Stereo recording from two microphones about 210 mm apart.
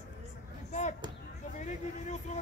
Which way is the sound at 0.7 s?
35° left (ahead or behind).